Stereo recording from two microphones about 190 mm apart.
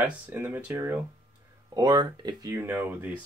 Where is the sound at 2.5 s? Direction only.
10° right (ahead or behind).